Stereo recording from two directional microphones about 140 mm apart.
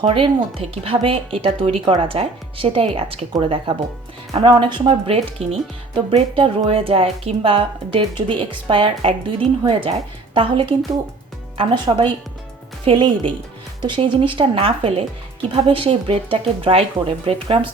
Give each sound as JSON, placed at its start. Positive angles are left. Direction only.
{"t": 0.0, "sound": "speech", "side_deg": -45}